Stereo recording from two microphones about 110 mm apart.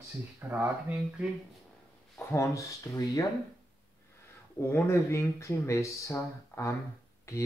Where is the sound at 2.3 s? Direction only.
30° left (ahead or behind).